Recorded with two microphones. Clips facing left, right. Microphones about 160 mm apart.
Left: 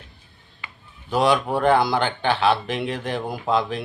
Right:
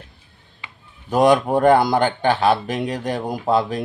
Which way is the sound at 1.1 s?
45° right (ahead or behind).